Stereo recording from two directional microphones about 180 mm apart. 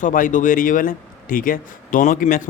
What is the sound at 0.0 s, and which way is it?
Speech, 45° left (ahead or behind).